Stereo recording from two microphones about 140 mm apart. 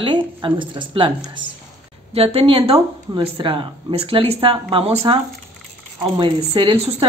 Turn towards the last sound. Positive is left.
turn(degrees=-40)  # may be behind; listen again after turning